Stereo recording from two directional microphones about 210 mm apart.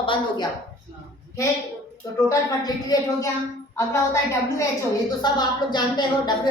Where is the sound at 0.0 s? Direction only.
25° left (ahead or behind).